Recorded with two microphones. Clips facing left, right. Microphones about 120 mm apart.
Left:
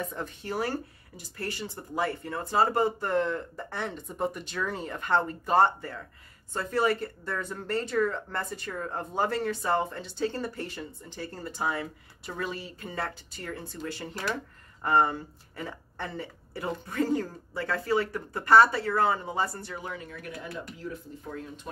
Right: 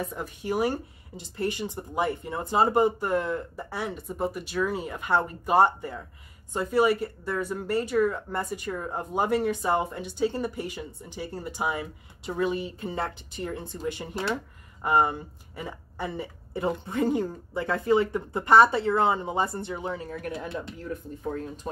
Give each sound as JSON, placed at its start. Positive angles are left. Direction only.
{"t": 0.1, "sound": "speech", "side_deg": -10}
{"t": 20.9, "sound": "speech", "side_deg": -55}